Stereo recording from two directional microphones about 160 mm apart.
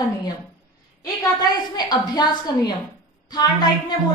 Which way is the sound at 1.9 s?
25° left (ahead or behind).